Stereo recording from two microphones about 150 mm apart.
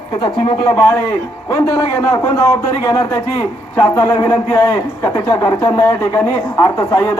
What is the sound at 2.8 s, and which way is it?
A man's voice, 20° left (ahead or behind).